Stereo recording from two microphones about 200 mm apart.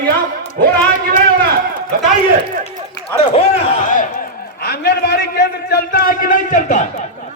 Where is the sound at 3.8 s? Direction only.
40° left (ahead or behind).